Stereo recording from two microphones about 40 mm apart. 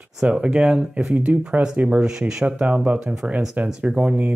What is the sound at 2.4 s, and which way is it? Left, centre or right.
Speech, right.